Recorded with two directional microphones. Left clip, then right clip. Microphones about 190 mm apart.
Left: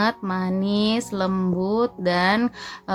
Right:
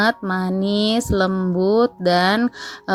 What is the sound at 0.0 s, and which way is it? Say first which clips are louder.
A woman's voice: right 4 dB; 30° right (ahead or behind).